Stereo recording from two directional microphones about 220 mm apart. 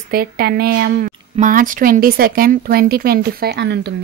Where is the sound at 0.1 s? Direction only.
40° right (ahead or behind).